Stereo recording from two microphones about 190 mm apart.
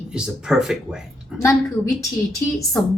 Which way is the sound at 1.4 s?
15° left (ahead or behind).